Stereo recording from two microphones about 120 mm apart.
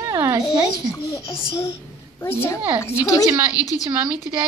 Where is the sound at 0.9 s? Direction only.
30° left (ahead or behind).